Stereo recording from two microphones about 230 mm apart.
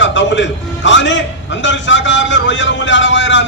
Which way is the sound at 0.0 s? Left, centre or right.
Left.